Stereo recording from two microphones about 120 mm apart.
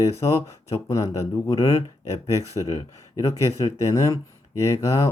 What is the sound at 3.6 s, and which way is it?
Speech, 25° left (ahead or behind).